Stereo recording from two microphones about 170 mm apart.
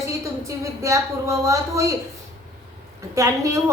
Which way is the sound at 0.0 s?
20° right (ahead or behind).